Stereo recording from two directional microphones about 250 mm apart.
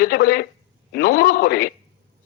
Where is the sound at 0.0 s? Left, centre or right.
Left.